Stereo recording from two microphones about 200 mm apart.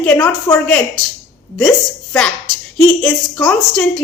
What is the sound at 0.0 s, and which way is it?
Speech, 5° left (ahead or behind).